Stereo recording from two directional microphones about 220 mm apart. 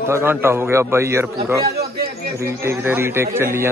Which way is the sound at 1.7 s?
45° right (ahead or behind).